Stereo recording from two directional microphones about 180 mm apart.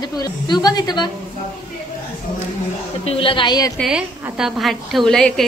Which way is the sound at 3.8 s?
5° right (ahead or behind).